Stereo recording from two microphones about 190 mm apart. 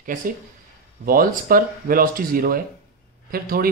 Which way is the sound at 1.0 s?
50° right (ahead or behind).